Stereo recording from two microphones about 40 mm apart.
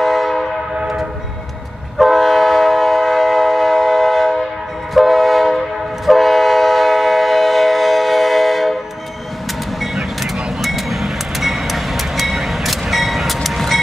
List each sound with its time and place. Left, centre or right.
0.0 s train: centre
2.0 s train: centre
9.8 s vehicle: centre